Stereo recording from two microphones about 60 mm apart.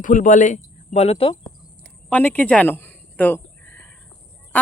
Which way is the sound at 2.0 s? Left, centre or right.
Left.